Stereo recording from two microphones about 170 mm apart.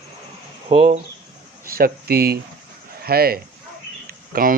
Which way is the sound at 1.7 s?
60° right (ahead or behind).